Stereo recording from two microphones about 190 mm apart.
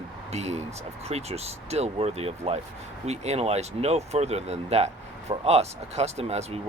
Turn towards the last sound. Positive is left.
turn(degrees=-35)  # may be behind; listen again after turning